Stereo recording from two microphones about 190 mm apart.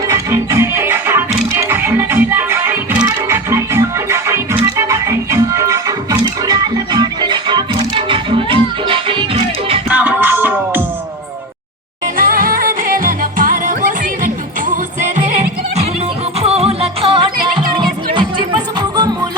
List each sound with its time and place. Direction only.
0.1 s music: 15° right (ahead or behind)
9.9 s music: 10° right (ahead or behind)
12.1 s music: 45° right (ahead or behind)
16.4 s music: 30° right (ahead or behind)